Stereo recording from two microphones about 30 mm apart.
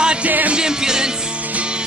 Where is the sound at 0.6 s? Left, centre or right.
Right.